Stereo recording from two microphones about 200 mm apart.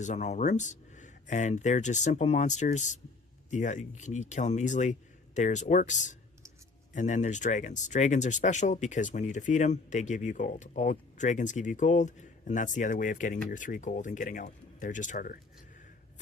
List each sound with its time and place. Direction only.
0.0 s speech: 35° left (ahead or behind)